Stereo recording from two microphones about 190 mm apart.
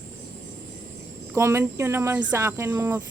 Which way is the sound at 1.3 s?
15° right (ahead or behind).